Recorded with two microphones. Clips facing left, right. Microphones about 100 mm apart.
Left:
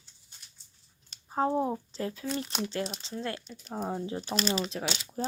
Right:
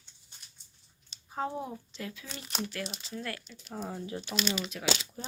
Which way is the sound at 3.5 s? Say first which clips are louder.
Left 5 dB; 40° left (ahead or behind).